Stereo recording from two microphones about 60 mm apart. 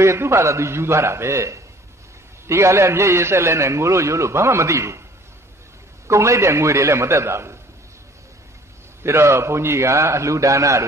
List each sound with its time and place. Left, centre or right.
0.0 s a man's voice: right
6.0 s a man's voice: right
9.0 s a man's voice: right